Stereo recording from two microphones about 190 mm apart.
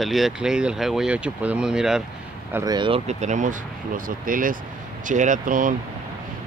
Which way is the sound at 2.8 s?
30° right (ahead or behind).